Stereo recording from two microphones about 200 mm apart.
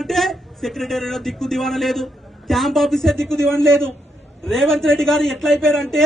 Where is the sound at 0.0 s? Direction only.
Centre (ahead or behind).